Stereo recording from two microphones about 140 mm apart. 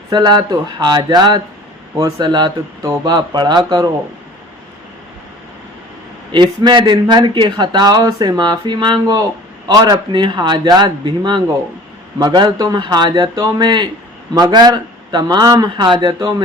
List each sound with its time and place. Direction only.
0.1 s speech: 30° right (ahead or behind)
6.3 s speech: 35° right (ahead or behind)